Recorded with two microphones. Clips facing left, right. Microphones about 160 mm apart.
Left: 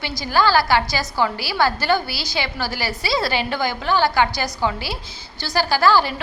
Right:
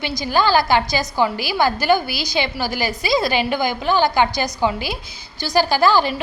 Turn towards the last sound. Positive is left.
turn(degrees=-20)  # may be behind; listen again after turning